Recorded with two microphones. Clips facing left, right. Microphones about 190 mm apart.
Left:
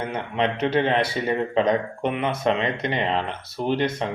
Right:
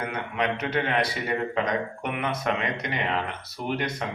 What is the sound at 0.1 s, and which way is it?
A man's voice, 30° left (ahead or behind).